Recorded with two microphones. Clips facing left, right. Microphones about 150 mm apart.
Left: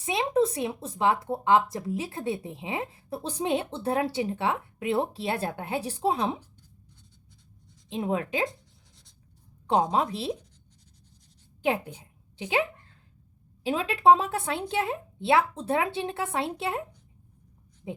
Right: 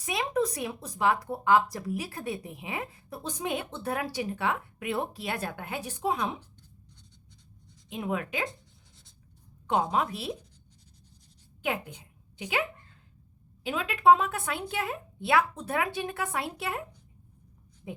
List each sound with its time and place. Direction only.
0.0 s speech: 25° left (ahead or behind)
6.4 s writing: 10° left (ahead or behind)
7.9 s speech: 30° left (ahead or behind)
9.9 s speech: 30° left (ahead or behind)
11.6 s a woman's voice: 30° left (ahead or behind)
13.7 s speech: 30° left (ahead or behind)